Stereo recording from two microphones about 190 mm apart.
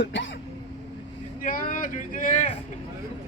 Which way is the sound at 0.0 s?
70° left (ahead or behind).